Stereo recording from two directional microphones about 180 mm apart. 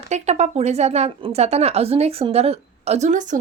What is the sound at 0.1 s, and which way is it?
Speech, 40° right (ahead or behind).